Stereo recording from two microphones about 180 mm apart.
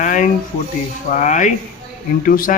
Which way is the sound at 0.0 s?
45° left (ahead or behind).